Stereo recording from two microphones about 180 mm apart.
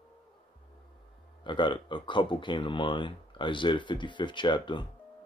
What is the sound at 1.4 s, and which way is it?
Speech, 25° left (ahead or behind).